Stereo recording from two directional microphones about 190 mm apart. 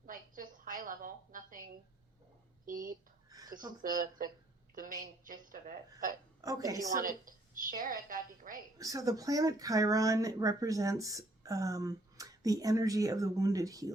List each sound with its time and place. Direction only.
0.0 s a sound: 45° right (ahead or behind)
2.7 s speech: 45° right (ahead or behind)
3.2 s a sound: 20° right (ahead or behind)
3.8 s a woman's voice: 45° right (ahead or behind)
6.4 s speech: 20° right (ahead or behind)
7.0 s a woman's voice: 45° right (ahead or behind)
8.8 s speech: 20° right (ahead or behind)